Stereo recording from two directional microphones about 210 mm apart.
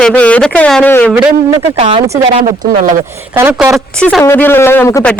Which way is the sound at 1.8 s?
30° right (ahead or behind).